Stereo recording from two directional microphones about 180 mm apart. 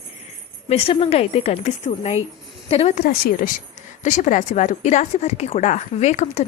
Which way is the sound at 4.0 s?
45° left (ahead or behind).